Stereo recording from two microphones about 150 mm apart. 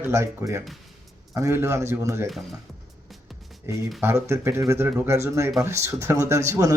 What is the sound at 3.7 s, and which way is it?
A man's voice, 15° right (ahead or behind).